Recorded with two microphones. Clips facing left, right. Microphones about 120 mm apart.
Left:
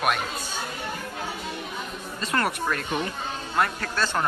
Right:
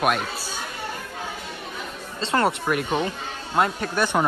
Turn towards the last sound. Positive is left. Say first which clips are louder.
# right 4 dB
turn(degrees=-20)  # may be behind; listen again after turning